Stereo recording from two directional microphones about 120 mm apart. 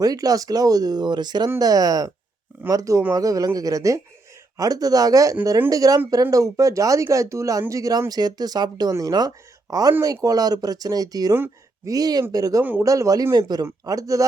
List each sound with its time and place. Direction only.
0.0 s speech: 30° right (ahead or behind)